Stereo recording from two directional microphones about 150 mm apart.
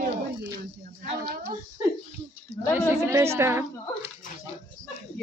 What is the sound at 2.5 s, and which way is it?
Speech, 90° right.